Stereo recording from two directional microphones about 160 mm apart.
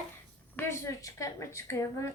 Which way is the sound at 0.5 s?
15° left (ahead or behind).